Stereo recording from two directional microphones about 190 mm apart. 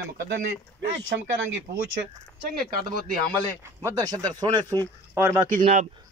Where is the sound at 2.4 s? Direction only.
55° right (ahead or behind).